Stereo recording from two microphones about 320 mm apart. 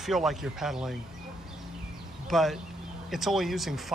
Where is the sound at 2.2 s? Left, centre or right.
Centre.